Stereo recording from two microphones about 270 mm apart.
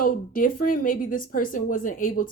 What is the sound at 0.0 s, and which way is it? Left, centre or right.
A woman's voice, left.